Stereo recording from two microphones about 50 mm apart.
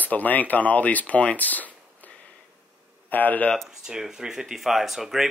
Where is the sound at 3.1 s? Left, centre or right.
Left.